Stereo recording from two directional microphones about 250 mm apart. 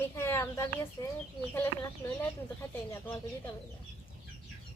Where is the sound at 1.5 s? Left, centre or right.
Centre.